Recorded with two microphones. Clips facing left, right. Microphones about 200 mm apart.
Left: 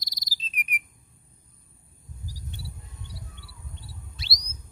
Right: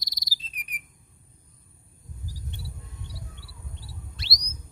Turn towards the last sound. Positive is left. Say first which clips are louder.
# right 1 dB
turn(degrees=0)  # may be behind; listen again after turning